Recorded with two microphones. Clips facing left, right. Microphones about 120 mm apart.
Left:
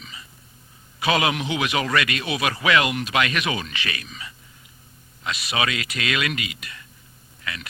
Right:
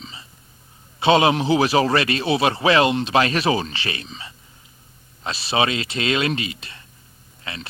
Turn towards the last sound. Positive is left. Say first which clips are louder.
# even
turn(degrees=-30)  # may be behind; listen again after turning